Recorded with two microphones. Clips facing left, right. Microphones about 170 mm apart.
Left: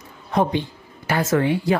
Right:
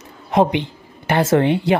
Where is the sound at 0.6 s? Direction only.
25° right (ahead or behind).